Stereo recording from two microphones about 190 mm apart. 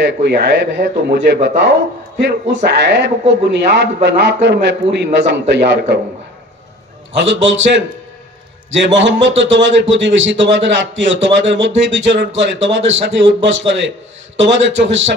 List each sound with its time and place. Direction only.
0.0 s a man's voice: 60° right (ahead or behind)
2.5 s a man's voice: 65° right (ahead or behind)
7.2 s a man's voice: 75° right (ahead or behind)